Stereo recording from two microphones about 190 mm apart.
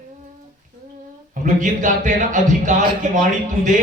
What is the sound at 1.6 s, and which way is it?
Speech, 40° right (ahead or behind).